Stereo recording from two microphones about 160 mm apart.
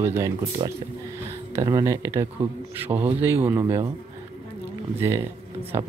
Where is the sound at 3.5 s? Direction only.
25° right (ahead or behind).